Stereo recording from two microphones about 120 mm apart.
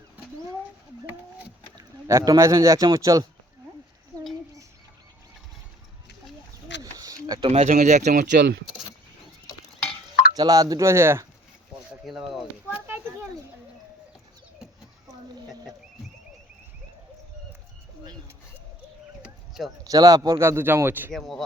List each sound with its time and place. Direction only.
1.7 s speech: 30° right (ahead or behind)
6.9 s a sound: 30° right (ahead or behind)
7.4 s speech: 65° right (ahead or behind); by 8.4 s 90° right
10.3 s speech: 30° right (ahead or behind)
12.0 s speech: centre (ahead or behind)
12.7 s a sound: 20° right (ahead or behind)
19.2 s a sound: 5° right (ahead or behind)
19.8 s speech: 30° right (ahead or behind)
21.1 s speech: centre (ahead or behind)